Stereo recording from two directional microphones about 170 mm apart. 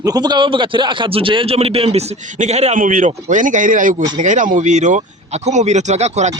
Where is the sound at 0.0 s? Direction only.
25° right (ahead or behind).